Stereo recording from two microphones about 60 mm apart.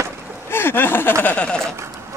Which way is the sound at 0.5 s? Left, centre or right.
Left.